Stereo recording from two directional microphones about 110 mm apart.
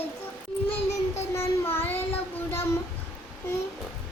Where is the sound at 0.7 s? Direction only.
25° left (ahead or behind).